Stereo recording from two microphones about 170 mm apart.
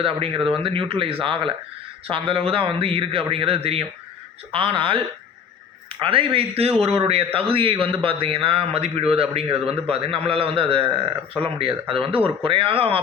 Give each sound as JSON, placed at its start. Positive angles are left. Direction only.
{"t": 0.0, "sound": "a man's voice", "side_deg": -30}